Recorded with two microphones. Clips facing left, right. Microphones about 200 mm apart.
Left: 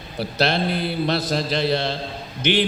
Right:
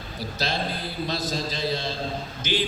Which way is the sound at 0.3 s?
70° left (ahead or behind).